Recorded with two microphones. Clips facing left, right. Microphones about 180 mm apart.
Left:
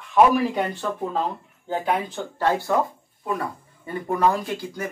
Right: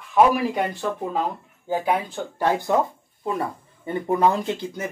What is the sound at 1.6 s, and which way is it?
Speech, 10° right (ahead or behind).